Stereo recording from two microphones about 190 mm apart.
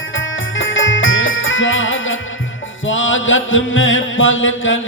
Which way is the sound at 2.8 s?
90° left.